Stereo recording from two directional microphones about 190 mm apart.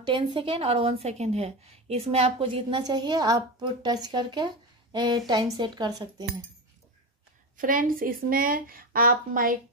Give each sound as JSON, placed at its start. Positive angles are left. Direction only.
{"t": 0.0, "sound": "a woman's voice", "side_deg": -25}
{"t": 7.5, "sound": "speech", "side_deg": -45}